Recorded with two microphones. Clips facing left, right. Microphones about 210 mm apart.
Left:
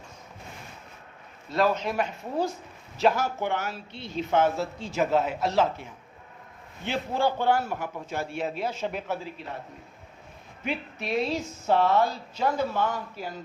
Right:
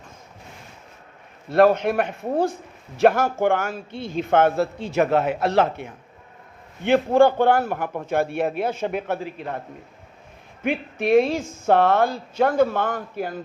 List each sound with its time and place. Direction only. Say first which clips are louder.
1.5 s a man's voice: right 8 dB; 60° right (ahead or behind)
10.6 s a man's voice: right 8 dB; 55° right (ahead or behind)